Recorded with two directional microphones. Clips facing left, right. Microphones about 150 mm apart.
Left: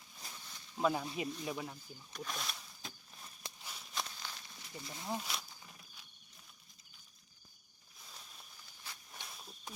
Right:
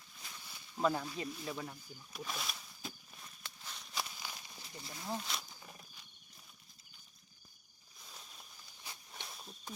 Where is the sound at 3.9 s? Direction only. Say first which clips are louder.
Even; 10° right (ahead or behind).